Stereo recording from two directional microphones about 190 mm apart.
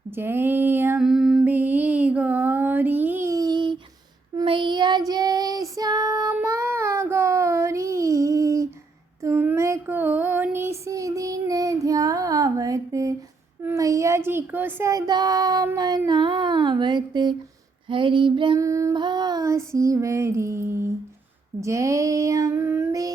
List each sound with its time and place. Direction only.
0.1 s female singing: 10° right (ahead or behind)
4.4 s child singing: 25° right (ahead or behind)
13.6 s a sound: 15° right (ahead or behind)
17.8 s female singing: 25° right (ahead or behind)
21.6 s child singing: 15° right (ahead or behind)